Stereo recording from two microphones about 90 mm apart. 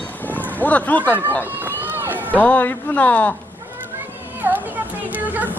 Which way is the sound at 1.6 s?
20° right (ahead or behind).